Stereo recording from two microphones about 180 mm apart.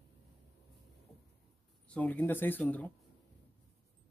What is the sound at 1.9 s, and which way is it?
Speech, 10° left (ahead or behind).